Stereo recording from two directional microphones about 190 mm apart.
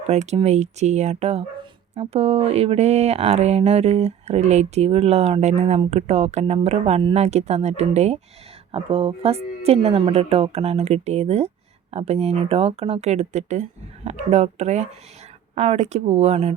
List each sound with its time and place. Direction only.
0.0 s speech: 35° right (ahead or behind)